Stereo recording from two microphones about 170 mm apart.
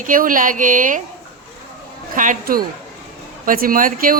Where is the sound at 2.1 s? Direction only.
50° right (ahead or behind).